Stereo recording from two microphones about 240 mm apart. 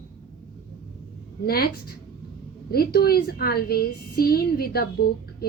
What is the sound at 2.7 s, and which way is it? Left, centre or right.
A woman's voice, left.